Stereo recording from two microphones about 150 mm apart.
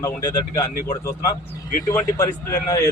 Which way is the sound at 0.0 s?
15° left (ahead or behind).